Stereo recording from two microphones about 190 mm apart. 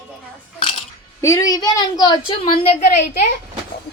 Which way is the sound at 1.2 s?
15° left (ahead or behind).